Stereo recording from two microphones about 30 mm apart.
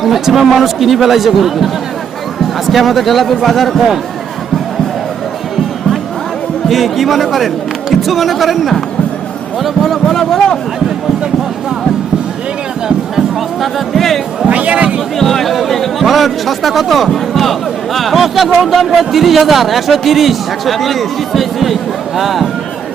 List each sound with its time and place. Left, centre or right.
0.0 s a man's voice: centre
6.7 s a man's voice: centre
13.6 s speech: centre
14.5 s speech: right
15.2 s a man's voice: centre